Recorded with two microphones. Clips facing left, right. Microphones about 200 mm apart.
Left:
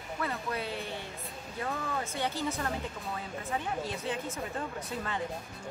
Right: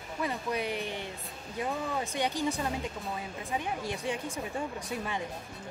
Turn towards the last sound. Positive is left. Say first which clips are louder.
# right 1 dB
turn(degrees=-15)  # may be behind; listen again after turning